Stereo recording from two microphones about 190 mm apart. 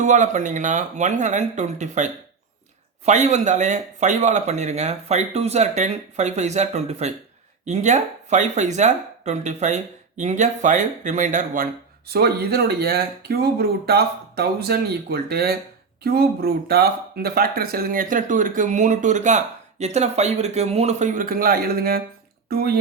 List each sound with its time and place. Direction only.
0.0 s speech: 40° right (ahead or behind)